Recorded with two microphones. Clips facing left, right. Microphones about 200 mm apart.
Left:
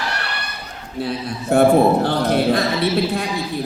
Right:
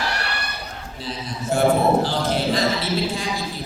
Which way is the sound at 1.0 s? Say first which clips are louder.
Left 4 dB; 60° left (ahead or behind).